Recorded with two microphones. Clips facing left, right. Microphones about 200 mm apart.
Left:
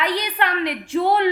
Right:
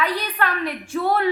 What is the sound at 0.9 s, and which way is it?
Speech, 20° left (ahead or behind).